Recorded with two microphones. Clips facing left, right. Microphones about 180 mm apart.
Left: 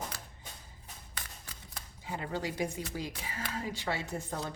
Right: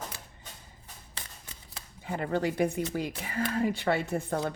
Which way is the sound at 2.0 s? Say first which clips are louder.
Right 7 dB; 55° right (ahead or behind).